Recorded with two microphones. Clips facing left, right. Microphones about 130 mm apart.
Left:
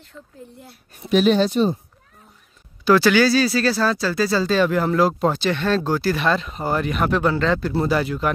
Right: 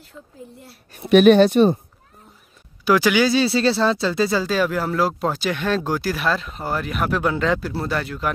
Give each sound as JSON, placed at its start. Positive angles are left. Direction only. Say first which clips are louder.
{"t": 0.0, "sound": "speech", "louder": "right 1 dB", "side_deg": 0}
{"t": 0.9, "sound": "speech", "louder": "right 5 dB", "side_deg": -65}
{"t": 2.8, "sound": "speech", "louder": "left 2 dB", "side_deg": -10}
{"t": 4.4, "sound": "speech", "louder": "left 2 dB", "side_deg": -10}
{"t": 7.7, "sound": "speech", "louder": "left 5 dB", "side_deg": 5}